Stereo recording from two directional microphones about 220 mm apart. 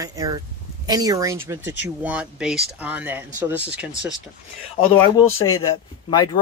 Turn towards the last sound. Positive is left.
turn(degrees=20)  # may be behind; listen again after turning